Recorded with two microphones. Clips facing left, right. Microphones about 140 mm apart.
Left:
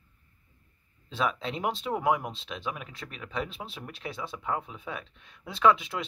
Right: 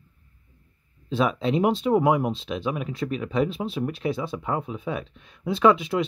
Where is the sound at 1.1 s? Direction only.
10° right (ahead or behind).